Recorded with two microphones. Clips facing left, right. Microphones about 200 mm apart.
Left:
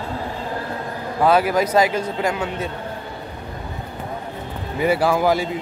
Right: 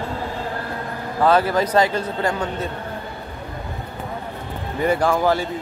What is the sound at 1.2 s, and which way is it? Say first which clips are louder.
A man's voice: even; 10° left (ahead or behind).